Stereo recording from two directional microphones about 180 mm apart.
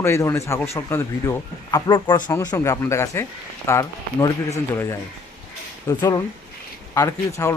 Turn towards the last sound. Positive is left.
turn(degrees=15)  # may be behind; listen again after turning